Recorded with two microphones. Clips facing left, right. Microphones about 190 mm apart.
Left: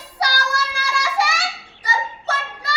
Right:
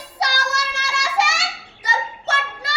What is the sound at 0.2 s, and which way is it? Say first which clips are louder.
Child singing: left 1 dB; 25° right (ahead or behind).